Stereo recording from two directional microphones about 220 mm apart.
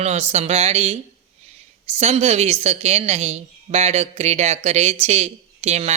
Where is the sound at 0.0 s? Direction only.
30° right (ahead or behind).